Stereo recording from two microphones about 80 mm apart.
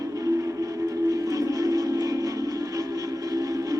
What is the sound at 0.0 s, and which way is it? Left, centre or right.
Music, right.